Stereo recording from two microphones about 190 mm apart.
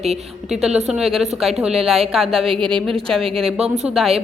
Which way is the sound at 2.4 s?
30° right (ahead or behind).